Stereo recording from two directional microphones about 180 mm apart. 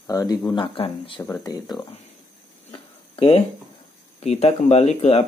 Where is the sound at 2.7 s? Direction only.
30° left (ahead or behind).